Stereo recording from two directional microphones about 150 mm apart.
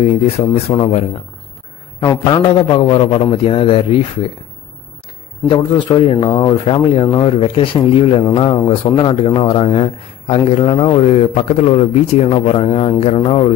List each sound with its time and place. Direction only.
0.7 s a man's voice: 40° left (ahead or behind)
2.0 s a man's voice: 30° left (ahead or behind)
5.5 s a man's voice: 30° left (ahead or behind)